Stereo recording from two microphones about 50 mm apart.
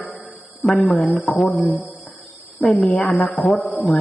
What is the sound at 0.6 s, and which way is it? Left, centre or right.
A woman's voice, centre.